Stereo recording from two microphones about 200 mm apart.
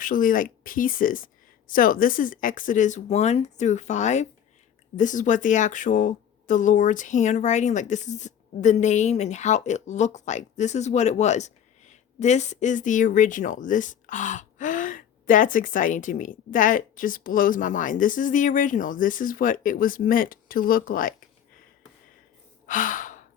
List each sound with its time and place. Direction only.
0.0 s a woman's voice: 45° left (ahead or behind)
22.6 s sigh: 40° left (ahead or behind)